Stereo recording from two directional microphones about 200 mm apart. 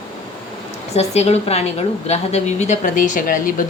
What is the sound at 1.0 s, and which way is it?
Speech, 30° left (ahead or behind).